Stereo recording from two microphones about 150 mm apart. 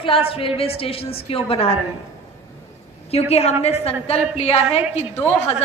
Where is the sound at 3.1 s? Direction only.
45° left (ahead or behind).